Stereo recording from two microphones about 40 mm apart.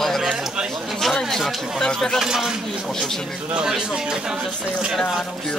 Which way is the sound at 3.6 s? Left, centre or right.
Centre.